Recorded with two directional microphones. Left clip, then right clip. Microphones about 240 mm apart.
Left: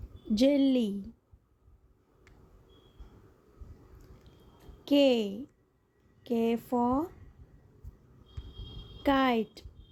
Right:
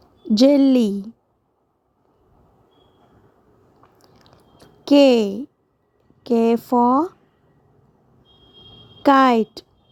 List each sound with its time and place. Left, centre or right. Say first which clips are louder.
0.3 s speech: right 11 dB; right
3.9 s chewing: right 8 dB; right
6.2 s speech: right 12 dB; right
9.0 s speech: right 13 dB; right